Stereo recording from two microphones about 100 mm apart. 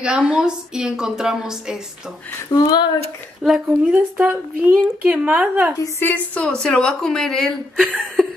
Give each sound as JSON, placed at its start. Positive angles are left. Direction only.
{"t": 0.0, "sound": "a woman's voice", "side_deg": -10}
{"t": 3.4, "sound": "a woman's voice", "side_deg": -5}
{"t": 3.9, "sound": "a woman's voice", "side_deg": -15}
{"t": 5.9, "sound": "a woman's voice", "side_deg": 20}